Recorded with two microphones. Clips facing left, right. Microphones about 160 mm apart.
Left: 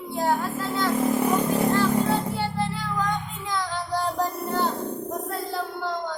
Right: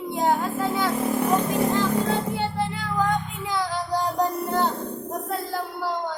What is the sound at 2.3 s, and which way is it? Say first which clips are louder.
Music: right 1 dB; 15° right (ahead or behind).